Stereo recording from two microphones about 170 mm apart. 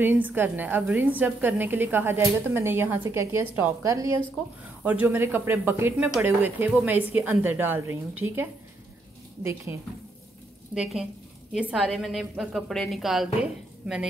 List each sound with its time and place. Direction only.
0.0 s a woman's voice: 10° right (ahead or behind)
10.7 s a woman's voice: 5° right (ahead or behind)